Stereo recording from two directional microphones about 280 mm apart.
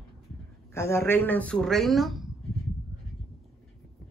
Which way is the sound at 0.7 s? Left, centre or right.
Centre.